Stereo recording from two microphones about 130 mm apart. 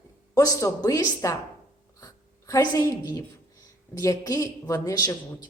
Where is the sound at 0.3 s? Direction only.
25° left (ahead or behind).